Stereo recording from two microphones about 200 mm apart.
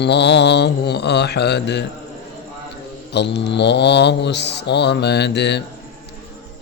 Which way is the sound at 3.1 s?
60° left (ahead or behind).